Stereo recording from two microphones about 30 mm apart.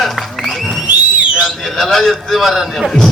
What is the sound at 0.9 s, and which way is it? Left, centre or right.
Whistle, right.